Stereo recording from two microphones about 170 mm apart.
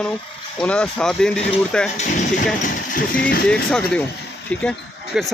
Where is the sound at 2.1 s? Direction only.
50° left (ahead or behind).